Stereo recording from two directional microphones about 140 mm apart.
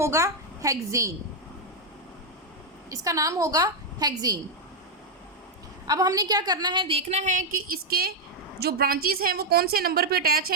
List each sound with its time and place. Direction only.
0.0 s a woman's voice: 20° right (ahead or behind)
2.9 s a woman's voice: 25° right (ahead or behind)
5.9 s a woman's voice: 25° right (ahead or behind); by 10.5 s 90° right